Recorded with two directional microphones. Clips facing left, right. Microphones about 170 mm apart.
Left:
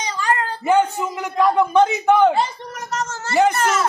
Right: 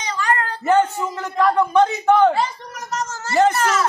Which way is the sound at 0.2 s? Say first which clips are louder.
Even; 30° left (ahead or behind).